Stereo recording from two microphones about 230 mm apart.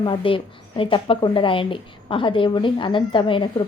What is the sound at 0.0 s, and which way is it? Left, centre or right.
A woman's voice, left.